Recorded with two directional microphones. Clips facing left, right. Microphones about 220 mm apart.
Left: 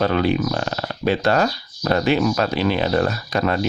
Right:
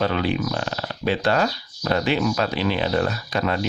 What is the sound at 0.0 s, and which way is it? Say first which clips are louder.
Speech: left 4 dB; 45° left (ahead or behind).